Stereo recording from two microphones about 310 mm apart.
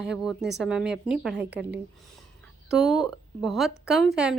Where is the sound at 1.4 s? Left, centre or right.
Right.